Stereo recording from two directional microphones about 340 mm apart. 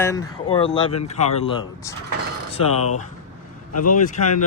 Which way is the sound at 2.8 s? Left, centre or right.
Left.